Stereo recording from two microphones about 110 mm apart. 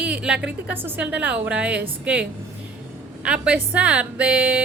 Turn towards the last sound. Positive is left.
turn(degrees=-10)  # may be behind; listen again after turning